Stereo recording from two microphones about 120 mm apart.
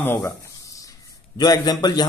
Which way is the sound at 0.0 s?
15° left (ahead or behind).